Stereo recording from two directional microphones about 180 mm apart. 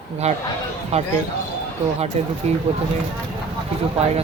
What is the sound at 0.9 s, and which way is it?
Speech, 35° right (ahead or behind).